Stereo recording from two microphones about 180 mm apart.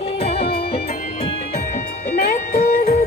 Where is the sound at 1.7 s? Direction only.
45° left (ahead or behind).